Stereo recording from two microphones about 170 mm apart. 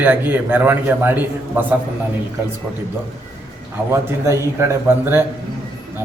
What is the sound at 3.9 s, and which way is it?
A man's voice, 15° right (ahead or behind).